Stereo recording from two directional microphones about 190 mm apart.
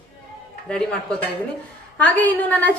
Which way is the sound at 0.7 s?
5° left (ahead or behind).